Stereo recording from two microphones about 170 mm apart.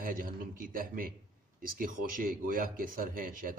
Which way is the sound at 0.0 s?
55° right (ahead or behind).